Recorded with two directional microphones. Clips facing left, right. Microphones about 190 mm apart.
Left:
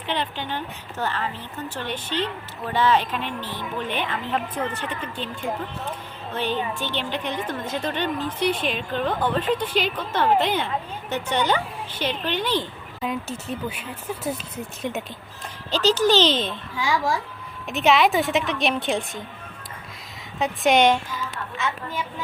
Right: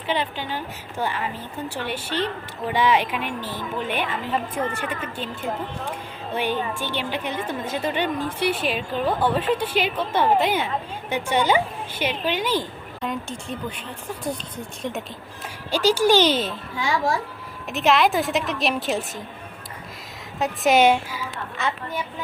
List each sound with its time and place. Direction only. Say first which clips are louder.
0.1 s a woman's voice: right 2 dB; 10° right (ahead or behind)
6.3 s a woman's voice: right 1 dB; 10° right (ahead or behind)
13.0 s speech: left 1 dB; 5° left (ahead or behind)
15.7 s a woman's voice: right 1 dB; 10° right (ahead or behind)
17.7 s speech: left 1 dB; centre (ahead or behind)
20.4 s a woman's voice: right 1 dB; 5° right (ahead or behind)